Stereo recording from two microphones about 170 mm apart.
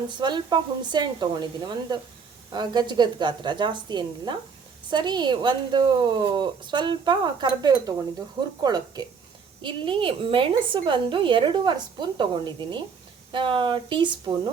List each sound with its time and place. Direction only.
0.2 s a woman's voice: 25° right (ahead or behind)